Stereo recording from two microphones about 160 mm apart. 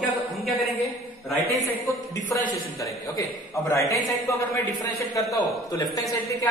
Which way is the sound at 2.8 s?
20° left (ahead or behind).